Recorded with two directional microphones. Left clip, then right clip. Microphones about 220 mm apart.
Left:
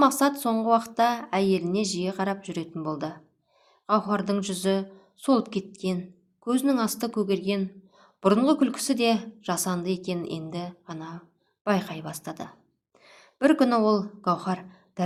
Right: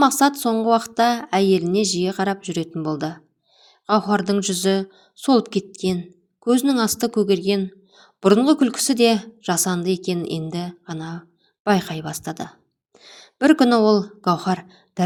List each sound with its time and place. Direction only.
0.0 s a woman's voice: 25° right (ahead or behind)